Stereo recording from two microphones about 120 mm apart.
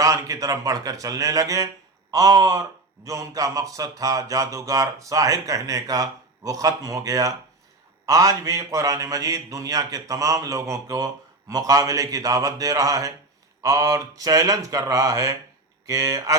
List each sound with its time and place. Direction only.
0.0 s a man's voice: 30° right (ahead or behind)